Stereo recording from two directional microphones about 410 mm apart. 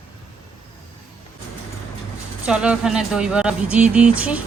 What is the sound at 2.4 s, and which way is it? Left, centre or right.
Speech, centre.